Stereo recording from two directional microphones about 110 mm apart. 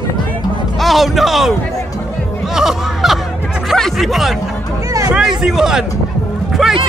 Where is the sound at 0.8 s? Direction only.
Centre (ahead or behind).